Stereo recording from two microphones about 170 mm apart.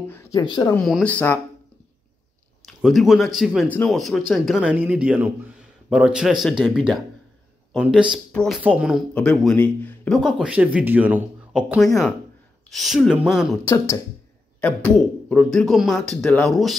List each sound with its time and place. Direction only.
0.1 s speech: 15° left (ahead or behind)
0.4 s speech: 25° left (ahead or behind)
0.7 s speech: 5° left (ahead or behind)
2.6 s speech: centre (ahead or behind)
14.6 s speech: 10° left (ahead or behind)